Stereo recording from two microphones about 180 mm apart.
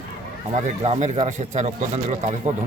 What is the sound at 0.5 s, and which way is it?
Speech, 40° right (ahead or behind).